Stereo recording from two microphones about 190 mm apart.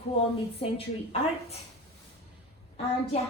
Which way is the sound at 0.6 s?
30° left (ahead or behind).